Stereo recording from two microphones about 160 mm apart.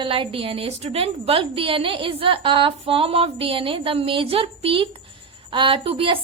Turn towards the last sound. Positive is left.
turn(degrees=-35)  # may be behind; listen again after turning